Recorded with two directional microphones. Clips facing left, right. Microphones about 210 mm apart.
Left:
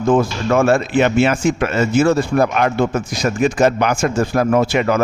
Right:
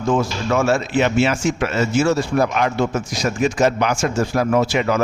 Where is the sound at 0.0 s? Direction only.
55° left (ahead or behind).